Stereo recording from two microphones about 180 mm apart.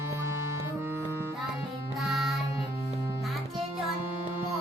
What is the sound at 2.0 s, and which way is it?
Music, centre (ahead or behind).